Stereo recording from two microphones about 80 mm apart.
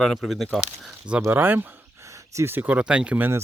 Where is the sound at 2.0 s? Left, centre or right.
Right.